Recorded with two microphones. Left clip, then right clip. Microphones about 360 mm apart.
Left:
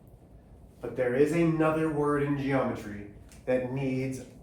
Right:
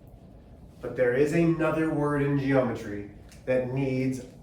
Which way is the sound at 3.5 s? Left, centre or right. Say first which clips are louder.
Right 2 dB; centre.